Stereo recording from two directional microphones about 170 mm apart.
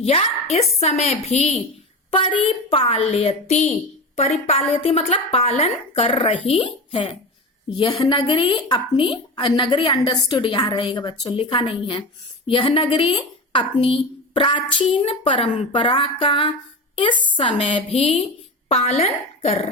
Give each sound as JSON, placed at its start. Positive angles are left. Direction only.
{"t": 0.0, "sound": "a woman's voice", "side_deg": 40}